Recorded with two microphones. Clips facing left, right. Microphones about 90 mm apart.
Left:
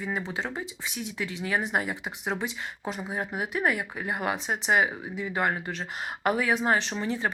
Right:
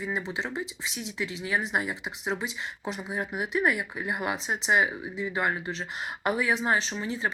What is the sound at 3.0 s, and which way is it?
Speech, 40° left (ahead or behind).